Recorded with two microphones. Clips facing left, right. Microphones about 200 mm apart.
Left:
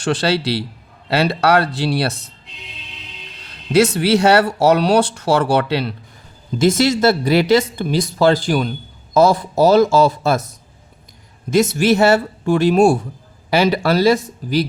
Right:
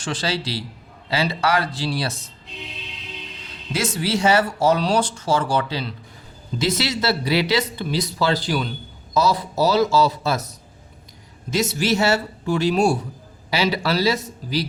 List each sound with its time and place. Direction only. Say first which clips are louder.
0.0 s speech: left 8 dB; 70° left (ahead or behind)
3.7 s speech: left 10 dB; 70° left (ahead or behind)
6.6 s speech: left 9 dB; 50° left (ahead or behind)
11.5 s speech: left 7 dB; 50° left (ahead or behind)